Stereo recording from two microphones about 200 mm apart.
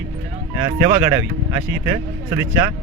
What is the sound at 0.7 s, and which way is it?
A man's voice, 15° right (ahead or behind).